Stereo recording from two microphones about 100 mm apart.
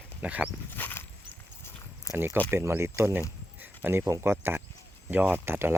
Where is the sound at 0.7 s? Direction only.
20° left (ahead or behind).